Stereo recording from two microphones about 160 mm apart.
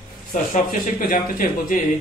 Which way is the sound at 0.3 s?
55° left (ahead or behind).